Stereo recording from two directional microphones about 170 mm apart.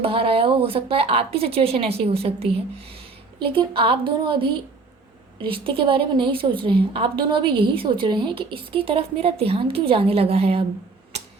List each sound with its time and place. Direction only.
0.0 s a woman's voice: 35° right (ahead or behind)